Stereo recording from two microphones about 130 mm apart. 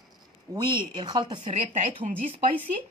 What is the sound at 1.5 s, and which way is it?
Speech, 60° right (ahead or behind).